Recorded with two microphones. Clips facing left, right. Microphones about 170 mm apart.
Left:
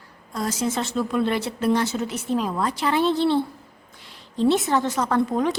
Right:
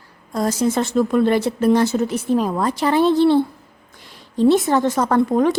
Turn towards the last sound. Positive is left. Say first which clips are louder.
# right 5 dB
turn(degrees=-50)  # may be behind; listen again after turning